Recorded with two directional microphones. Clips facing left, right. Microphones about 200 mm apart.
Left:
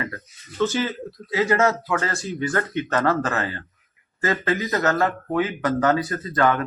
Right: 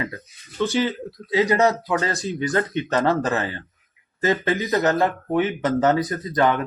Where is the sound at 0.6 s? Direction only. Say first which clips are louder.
Right 1 dB; 15° right (ahead or behind).